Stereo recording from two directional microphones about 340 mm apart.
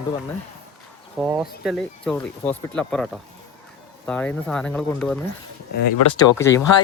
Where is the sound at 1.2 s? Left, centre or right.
Centre.